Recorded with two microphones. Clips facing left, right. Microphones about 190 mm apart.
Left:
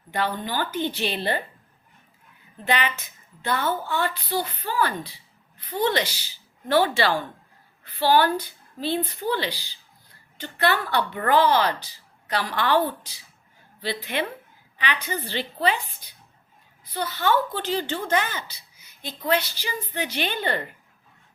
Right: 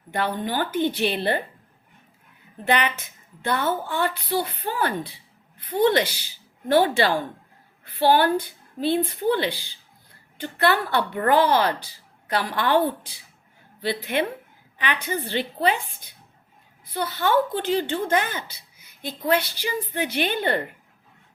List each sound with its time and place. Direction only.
0.1 s a woman's voice: 55° right (ahead or behind)
2.6 s a woman's voice: 50° right (ahead or behind)
13.8 s a woman's voice: 50° right (ahead or behind)
16.9 s a woman's voice: 50° right (ahead or behind)